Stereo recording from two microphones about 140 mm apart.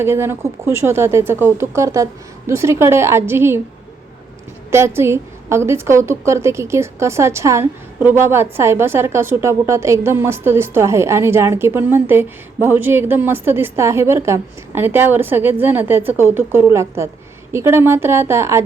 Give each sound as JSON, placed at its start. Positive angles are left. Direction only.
{"t": 0.0, "sound": "a woman's voice", "side_deg": -15}
{"t": 4.7, "sound": "a woman's voice", "side_deg": -20}